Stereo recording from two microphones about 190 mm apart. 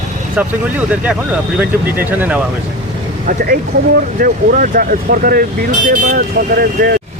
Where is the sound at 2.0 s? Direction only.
10° right (ahead or behind).